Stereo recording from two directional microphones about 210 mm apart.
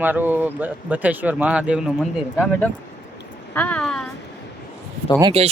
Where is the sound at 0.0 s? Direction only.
10° right (ahead or behind).